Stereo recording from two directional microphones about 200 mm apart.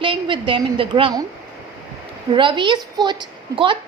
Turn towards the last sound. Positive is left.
turn(degrees=-25)  # may be behind; listen again after turning